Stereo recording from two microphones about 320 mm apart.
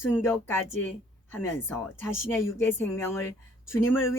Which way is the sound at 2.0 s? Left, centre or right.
Left.